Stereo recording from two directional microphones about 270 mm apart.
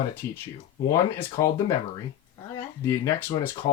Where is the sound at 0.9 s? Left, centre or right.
Centre.